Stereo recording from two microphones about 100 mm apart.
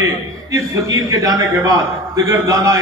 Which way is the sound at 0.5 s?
35° right (ahead or behind).